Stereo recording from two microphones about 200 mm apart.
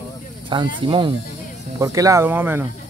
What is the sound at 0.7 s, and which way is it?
Speech, 25° right (ahead or behind).